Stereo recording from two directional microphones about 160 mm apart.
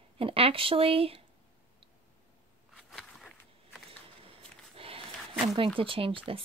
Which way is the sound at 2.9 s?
Centre (ahead or behind).